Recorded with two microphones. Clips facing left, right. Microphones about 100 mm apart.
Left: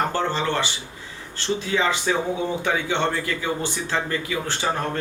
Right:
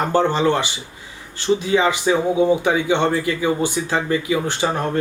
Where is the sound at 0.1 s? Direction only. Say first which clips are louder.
Right 7 dB; 20° right (ahead or behind).